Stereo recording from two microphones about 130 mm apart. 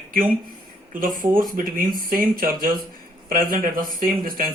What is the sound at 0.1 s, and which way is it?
Speech, 90° right.